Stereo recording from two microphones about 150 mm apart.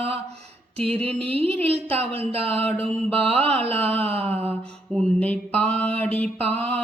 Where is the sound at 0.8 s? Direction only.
40° right (ahead or behind).